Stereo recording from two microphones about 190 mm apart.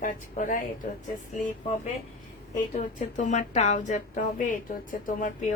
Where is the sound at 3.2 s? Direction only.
40° left (ahead or behind).